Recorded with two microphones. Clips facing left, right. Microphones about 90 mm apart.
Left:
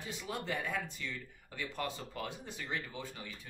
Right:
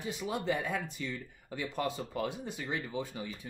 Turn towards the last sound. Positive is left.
turn(degrees=-15)  # may be behind; listen again after turning